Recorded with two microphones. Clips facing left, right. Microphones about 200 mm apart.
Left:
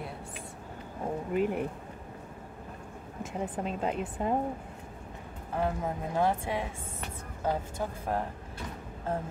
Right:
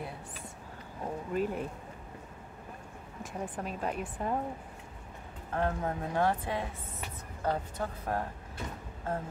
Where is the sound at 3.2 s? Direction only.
25° left (ahead or behind).